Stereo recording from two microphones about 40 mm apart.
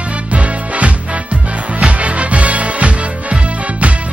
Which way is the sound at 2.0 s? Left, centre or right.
Right.